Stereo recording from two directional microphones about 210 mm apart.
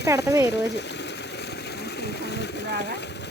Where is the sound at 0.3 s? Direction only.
15° right (ahead or behind).